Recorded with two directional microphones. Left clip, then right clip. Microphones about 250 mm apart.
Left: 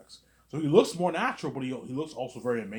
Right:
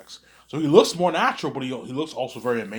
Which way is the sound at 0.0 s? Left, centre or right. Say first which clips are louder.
Right 9 dB; centre.